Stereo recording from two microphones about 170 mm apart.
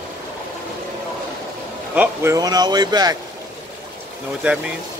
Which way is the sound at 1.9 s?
20° right (ahead or behind).